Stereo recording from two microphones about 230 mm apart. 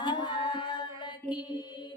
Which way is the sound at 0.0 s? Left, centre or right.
Centre.